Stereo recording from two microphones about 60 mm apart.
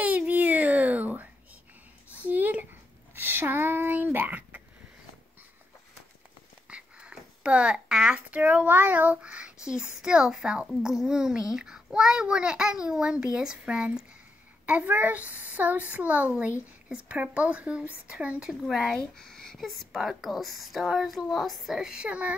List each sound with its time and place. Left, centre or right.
0.0 s a sound: right
6.7 s a sound: centre
8.3 s child singing: right
10.7 s a child's voice: centre
14.7 s child singing: right
18.7 s speech: centre
18.9 s speech: centre
21.7 s a child's voice: centre